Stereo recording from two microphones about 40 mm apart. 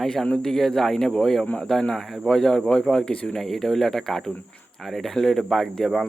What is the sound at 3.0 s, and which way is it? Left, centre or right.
Mantra, left.